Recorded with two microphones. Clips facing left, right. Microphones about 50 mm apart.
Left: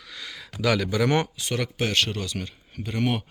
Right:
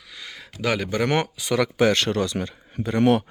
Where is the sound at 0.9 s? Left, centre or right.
Right.